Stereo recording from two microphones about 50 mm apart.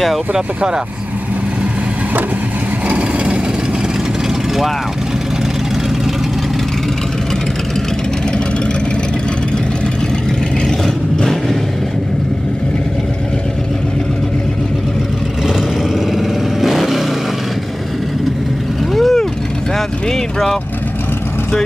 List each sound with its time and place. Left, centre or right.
0.3 s speech: centre
11.1 s vehicle: centre
16.2 s vehicle: centre
18.9 s vehicle: centre
20.1 s speech: centre